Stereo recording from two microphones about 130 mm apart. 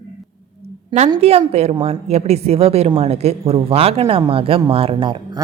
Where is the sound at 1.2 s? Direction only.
50° right (ahead or behind).